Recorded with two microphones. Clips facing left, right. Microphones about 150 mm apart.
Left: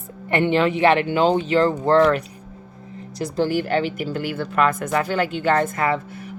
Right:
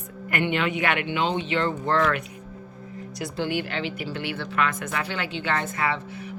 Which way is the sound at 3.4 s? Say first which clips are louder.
Left 8 dB; 40° left (ahead or behind).